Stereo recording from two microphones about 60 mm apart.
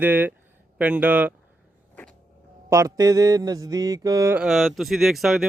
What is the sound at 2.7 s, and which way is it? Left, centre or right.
Mantra, right.